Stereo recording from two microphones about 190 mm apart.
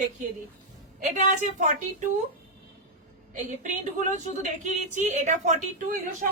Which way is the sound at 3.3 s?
40° right (ahead or behind).